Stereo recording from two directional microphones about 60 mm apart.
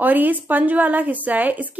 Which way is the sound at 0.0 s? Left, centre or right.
Right.